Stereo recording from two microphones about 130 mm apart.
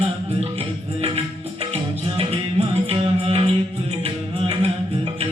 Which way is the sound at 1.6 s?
50° right (ahead or behind).